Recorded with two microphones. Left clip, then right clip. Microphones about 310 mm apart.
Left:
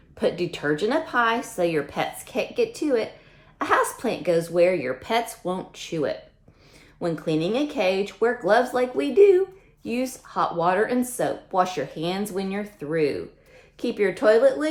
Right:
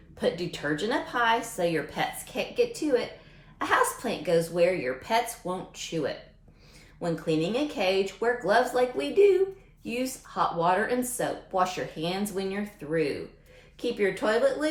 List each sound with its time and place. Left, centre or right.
0.2 s speech: left